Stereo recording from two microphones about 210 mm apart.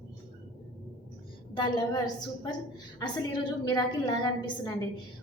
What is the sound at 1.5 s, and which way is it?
Speech, 20° left (ahead or behind).